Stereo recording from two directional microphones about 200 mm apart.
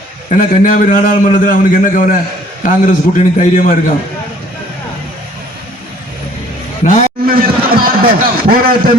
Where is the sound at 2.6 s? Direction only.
40° left (ahead or behind).